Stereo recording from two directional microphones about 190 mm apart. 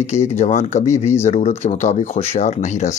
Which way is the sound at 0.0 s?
35° left (ahead or behind).